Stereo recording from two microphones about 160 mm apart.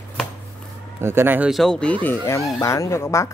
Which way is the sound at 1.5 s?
5° left (ahead or behind).